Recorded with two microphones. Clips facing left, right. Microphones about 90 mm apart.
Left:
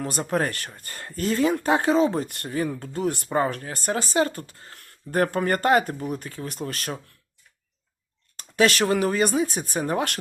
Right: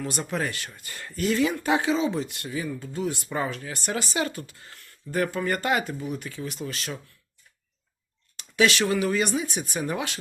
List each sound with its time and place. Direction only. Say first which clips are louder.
0.0 s speech: left 4 dB; 40° left (ahead or behind)
4.9 s speech: left 4 dB; 50° left (ahead or behind)
8.4 s speech: left 2 dB; 40° left (ahead or behind)